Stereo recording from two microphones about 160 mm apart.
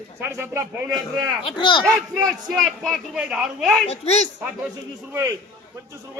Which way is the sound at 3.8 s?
40° left (ahead or behind).